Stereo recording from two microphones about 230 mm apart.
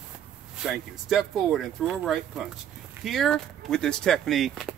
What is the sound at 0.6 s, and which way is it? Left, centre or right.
Speech, centre.